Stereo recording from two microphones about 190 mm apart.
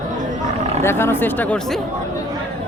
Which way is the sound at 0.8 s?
15° left (ahead or behind).